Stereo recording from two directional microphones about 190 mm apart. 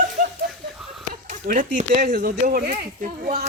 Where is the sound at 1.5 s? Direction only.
40° right (ahead or behind).